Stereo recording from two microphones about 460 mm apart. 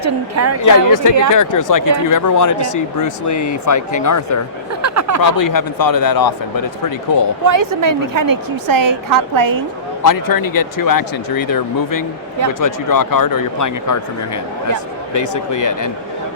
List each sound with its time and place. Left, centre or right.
0.0 s a woman's voice: right
0.6 s speech: left
4.8 s a sound: right
5.4 s speech: left
7.4 s a woman's voice: right
10.0 s speech: left
15.1 s speech: left